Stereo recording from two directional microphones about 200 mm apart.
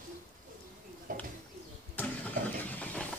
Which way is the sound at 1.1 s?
45° right (ahead or behind).